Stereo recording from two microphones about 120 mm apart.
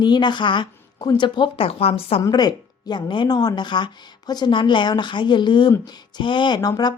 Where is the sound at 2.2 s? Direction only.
35° left (ahead or behind).